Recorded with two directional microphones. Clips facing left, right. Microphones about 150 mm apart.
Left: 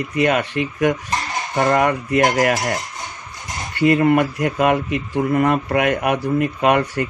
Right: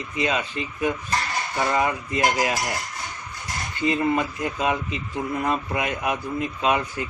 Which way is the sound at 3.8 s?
70° left (ahead or behind).